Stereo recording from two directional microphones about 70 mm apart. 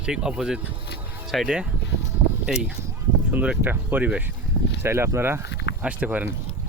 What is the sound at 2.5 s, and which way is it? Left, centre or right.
Speech, centre.